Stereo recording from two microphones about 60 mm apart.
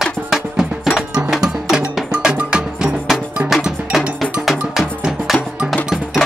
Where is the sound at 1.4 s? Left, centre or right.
Centre.